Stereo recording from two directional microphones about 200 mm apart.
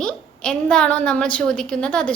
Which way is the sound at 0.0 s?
5° left (ahead or behind).